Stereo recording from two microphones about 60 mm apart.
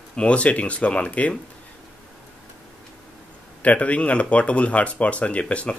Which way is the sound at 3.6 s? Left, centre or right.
Left.